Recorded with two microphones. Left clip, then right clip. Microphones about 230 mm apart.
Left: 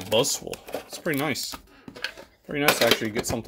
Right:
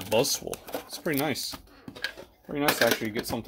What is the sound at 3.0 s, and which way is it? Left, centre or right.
Speech, centre.